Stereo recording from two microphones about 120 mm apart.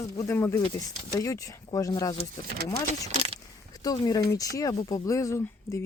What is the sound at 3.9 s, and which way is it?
Speech, 30° left (ahead or behind).